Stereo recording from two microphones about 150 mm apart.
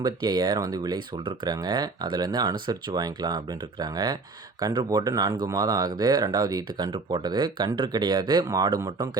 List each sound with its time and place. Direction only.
0.0 s speech: 30° right (ahead or behind)